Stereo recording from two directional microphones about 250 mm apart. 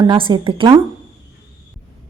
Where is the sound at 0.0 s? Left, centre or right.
Centre.